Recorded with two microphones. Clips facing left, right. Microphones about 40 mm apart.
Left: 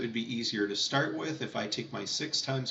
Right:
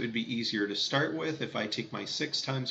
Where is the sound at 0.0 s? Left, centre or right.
Centre.